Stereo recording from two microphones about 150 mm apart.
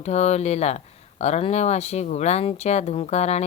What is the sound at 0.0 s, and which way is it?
Speech, 45° left (ahead or behind).